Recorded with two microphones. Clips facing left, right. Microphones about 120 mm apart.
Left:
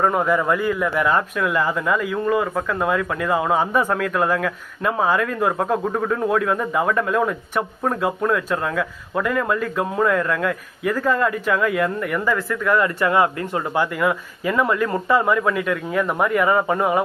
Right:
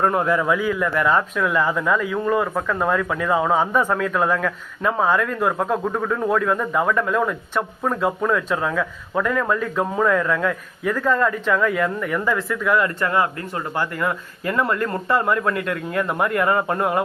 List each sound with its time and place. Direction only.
0.0 s speech: centre (ahead or behind)
13.0 s speech: 20° left (ahead or behind)
13.7 s speech: 5° left (ahead or behind)